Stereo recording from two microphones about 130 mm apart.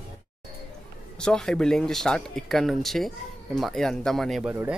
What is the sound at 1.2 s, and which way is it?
Speech, 5° left (ahead or behind).